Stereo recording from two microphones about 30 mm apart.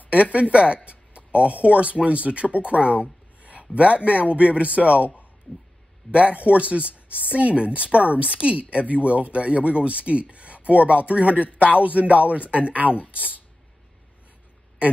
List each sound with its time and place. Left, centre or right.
0.1 s speech: right
2.5 s a sound: right
3.7 s speech: right